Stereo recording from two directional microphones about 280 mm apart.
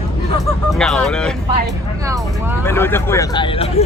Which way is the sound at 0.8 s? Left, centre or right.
Centre.